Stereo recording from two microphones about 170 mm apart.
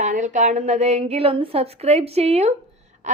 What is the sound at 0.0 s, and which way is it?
A woman's voice, 45° right (ahead or behind).